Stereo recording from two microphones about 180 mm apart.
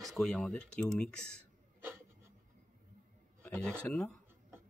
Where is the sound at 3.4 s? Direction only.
5° left (ahead or behind).